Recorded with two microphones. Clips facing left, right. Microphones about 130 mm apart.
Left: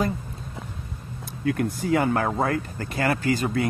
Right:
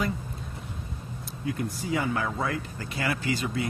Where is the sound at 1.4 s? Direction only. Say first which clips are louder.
Left 7 dB; 65° left (ahead or behind).